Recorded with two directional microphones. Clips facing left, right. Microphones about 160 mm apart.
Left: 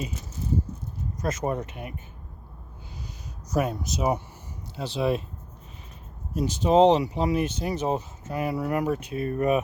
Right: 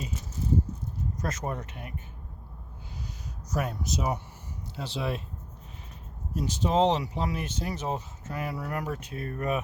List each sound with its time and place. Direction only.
1.2 s speech: 15° left (ahead or behind)
3.5 s speech: 15° left (ahead or behind)
6.3 s speech: 15° left (ahead or behind)